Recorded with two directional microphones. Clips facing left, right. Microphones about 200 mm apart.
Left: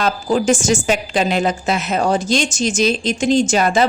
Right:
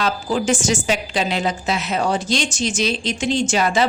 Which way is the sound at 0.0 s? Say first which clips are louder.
Left 4 dB; 45° left (ahead or behind).